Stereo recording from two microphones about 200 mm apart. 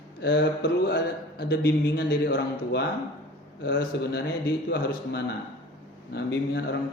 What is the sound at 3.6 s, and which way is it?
Mantra, 55° left (ahead or behind).